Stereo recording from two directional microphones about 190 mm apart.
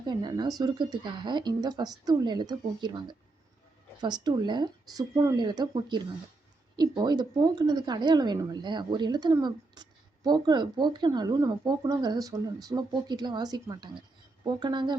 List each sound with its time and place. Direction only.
0.0 s a woman's voice: 20° right (ahead or behind)